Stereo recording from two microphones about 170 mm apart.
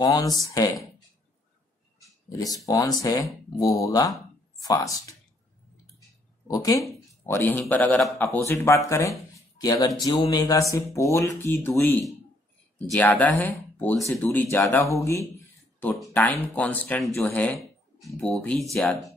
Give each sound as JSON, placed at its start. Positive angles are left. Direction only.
{"t": 0.0, "sound": "speech", "side_deg": 25}
{"t": 2.2, "sound": "speech", "side_deg": 20}
{"t": 6.4, "sound": "speech", "side_deg": 20}
{"t": 8.4, "sound": "speech", "side_deg": 15}
{"t": 12.8, "sound": "speech", "side_deg": 5}
{"t": 16.1, "sound": "speech", "side_deg": 10}